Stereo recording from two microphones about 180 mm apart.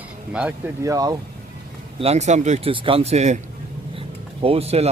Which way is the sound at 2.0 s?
35° right (ahead or behind).